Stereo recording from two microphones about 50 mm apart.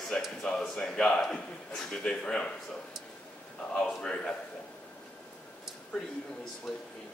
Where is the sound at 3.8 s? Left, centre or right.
Centre.